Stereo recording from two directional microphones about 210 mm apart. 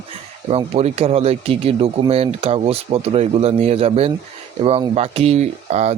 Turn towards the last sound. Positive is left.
turn(degrees=-30)  # may be behind; listen again after turning